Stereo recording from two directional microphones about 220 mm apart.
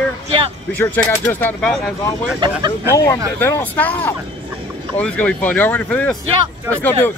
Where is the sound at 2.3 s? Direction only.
20° right (ahead or behind).